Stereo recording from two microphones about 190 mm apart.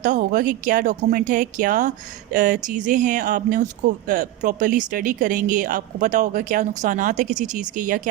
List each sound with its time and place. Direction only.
0.0 s speech: 45° right (ahead or behind)